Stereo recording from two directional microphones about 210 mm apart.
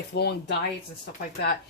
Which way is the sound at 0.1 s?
50° left (ahead or behind).